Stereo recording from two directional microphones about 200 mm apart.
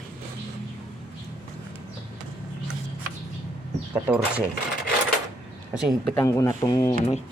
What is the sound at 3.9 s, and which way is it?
Speech, 10° right (ahead or behind).